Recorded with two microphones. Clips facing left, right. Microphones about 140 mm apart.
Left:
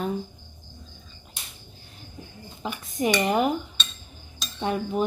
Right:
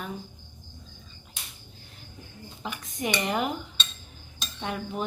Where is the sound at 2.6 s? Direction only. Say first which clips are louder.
Left 6 dB; 25° left (ahead or behind).